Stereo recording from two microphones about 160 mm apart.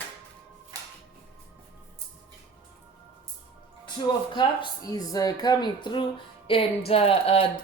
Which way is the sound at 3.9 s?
30° left (ahead or behind).